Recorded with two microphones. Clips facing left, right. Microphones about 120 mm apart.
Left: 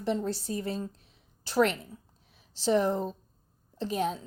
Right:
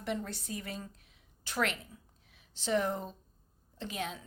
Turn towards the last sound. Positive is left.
turn(degrees=35)  # may be behind; listen again after turning